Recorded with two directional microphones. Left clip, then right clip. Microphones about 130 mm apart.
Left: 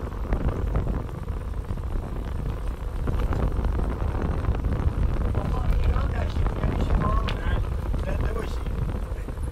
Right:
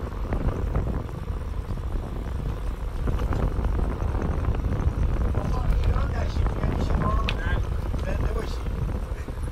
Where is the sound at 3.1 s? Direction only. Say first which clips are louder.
Even; 45° right (ahead or behind).